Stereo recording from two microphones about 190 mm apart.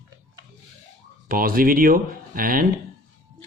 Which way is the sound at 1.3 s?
50° right (ahead or behind).